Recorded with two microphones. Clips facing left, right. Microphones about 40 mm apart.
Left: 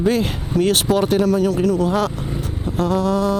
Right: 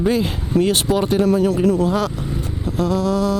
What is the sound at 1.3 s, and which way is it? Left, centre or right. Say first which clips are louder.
Speech: right 1 dB; right.